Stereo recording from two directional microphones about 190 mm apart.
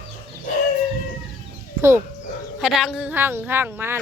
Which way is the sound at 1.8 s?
15° right (ahead or behind).